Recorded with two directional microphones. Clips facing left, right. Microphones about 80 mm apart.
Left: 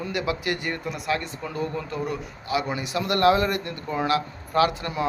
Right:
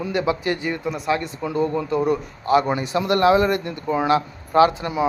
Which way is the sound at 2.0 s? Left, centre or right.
Right.